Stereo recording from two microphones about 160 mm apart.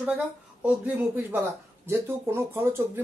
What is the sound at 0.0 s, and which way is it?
Speech, 10° right (ahead or behind).